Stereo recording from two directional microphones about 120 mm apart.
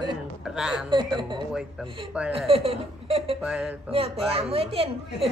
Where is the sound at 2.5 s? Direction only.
55° right (ahead or behind).